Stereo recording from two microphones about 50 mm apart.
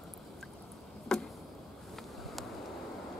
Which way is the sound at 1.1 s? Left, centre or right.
Centre.